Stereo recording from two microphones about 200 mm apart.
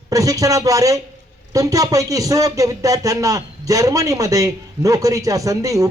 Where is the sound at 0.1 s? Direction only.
15° right (ahead or behind).